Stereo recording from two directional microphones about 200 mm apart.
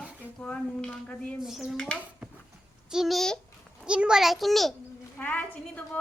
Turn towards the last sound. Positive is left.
turn(degrees=10)  # may be behind; listen again after turning